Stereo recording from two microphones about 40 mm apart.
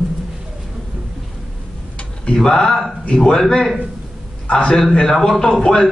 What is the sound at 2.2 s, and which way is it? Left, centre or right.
Speech, centre.